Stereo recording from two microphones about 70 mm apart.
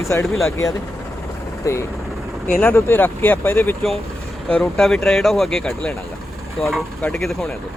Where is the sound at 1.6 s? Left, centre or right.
Left.